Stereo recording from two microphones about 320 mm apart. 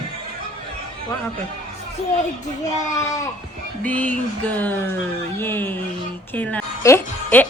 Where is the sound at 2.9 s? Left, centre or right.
Centre.